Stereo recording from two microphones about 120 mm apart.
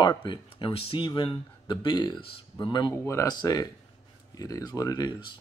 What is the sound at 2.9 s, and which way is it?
Speech, 20° left (ahead or behind).